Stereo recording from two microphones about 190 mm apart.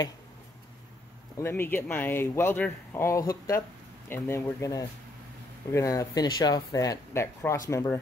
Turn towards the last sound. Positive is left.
turn(degrees=15)  # may be behind; listen again after turning